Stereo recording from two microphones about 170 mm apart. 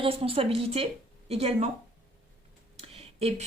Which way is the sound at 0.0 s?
35° right (ahead or behind).